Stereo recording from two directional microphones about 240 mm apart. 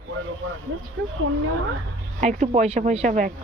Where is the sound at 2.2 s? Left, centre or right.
Right.